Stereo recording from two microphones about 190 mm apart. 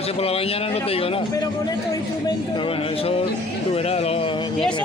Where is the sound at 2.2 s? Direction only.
25° left (ahead or behind).